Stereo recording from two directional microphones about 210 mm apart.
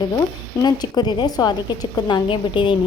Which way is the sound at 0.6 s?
20° left (ahead or behind).